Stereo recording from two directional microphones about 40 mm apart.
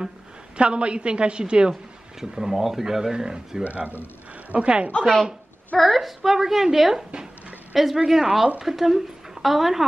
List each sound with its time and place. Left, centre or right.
0.6 s a woman's voice: right
2.1 s speech: centre
4.5 s a woman's voice: right
5.8 s a woman's voice: centre